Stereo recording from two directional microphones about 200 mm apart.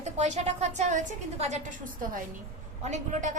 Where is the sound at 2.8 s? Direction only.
35° right (ahead or behind).